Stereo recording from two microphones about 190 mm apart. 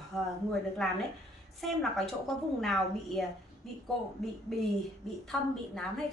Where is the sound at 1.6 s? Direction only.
Centre (ahead or behind).